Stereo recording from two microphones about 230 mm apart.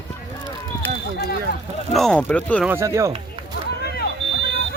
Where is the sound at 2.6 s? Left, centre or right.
Centre.